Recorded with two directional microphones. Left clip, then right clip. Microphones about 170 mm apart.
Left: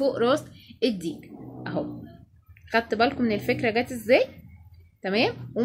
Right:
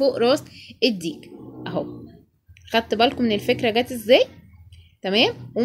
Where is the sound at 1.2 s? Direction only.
15° right (ahead or behind).